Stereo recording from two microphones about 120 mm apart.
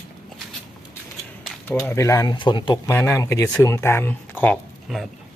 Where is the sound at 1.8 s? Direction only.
25° left (ahead or behind).